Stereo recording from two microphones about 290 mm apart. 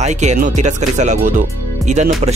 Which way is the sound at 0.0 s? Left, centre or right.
Right.